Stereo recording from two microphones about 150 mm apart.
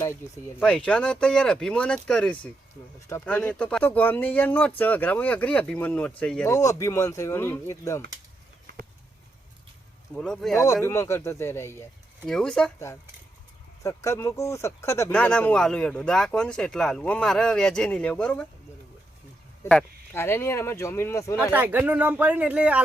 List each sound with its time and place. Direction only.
0.6 s speech: 5° left (ahead or behind)
6.5 s speech: 20° left (ahead or behind)
10.2 s speech: 5° left (ahead or behind)
10.8 s speech: 20° left (ahead or behind)
12.2 s speech: 5° left (ahead or behind)
13.8 s speech: 20° left (ahead or behind)
15.1 s speech: 5° left (ahead or behind)
19.6 s speech: 10° left (ahead or behind)
21.5 s speech: 10° right (ahead or behind)